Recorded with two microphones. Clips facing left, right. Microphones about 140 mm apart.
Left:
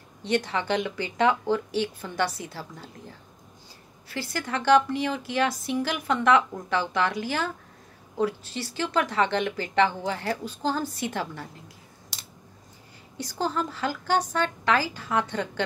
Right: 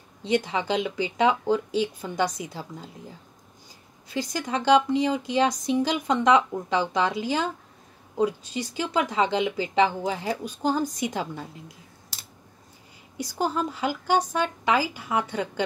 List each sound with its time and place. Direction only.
0.2 s a woman's voice: 15° right (ahead or behind)
13.2 s a woman's voice: 10° right (ahead or behind)